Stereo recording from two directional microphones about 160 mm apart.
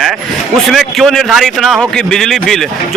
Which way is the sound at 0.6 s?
Centre (ahead or behind).